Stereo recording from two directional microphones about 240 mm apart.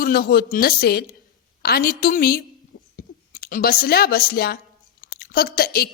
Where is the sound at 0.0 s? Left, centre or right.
Left.